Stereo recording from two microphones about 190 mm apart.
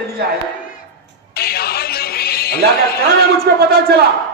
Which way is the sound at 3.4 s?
60° right (ahead or behind).